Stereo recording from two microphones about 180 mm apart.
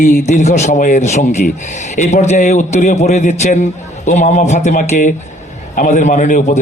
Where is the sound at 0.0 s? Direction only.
45° left (ahead or behind).